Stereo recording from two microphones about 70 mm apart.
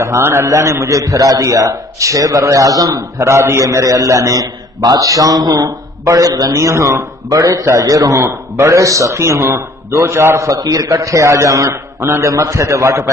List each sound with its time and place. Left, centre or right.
0.0 s a man's voice: right
3.3 s a man's voice: right
6.0 s a man's voice: right
10.5 s a man's voice: right